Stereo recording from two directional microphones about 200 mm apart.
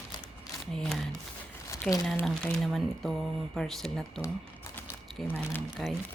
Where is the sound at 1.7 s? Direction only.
15° left (ahead or behind).